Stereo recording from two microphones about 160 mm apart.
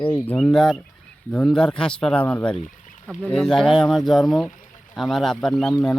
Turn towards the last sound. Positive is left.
turn(degrees=5)  # may be behind; listen again after turning